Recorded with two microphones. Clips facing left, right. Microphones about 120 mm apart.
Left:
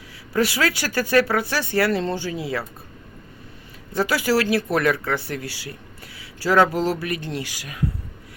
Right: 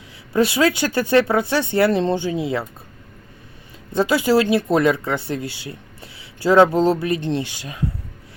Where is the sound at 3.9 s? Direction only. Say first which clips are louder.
Right 4 dB; 20° right (ahead or behind).